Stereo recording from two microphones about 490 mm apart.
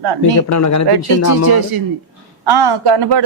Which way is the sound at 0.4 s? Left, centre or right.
Left.